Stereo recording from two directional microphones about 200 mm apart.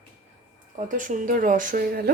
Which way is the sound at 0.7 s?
40° right (ahead or behind).